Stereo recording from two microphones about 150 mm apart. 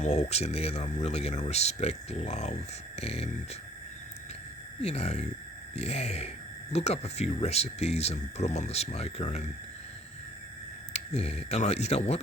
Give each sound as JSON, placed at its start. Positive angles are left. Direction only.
{"t": 0.0, "sound": "speech", "side_deg": 50}
{"t": 4.8, "sound": "speech", "side_deg": 45}
{"t": 10.9, "sound": "speech", "side_deg": 45}